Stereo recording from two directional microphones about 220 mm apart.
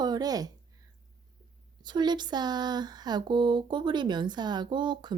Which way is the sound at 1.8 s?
20° right (ahead or behind).